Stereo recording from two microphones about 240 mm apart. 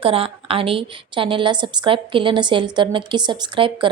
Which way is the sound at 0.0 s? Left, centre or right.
Right.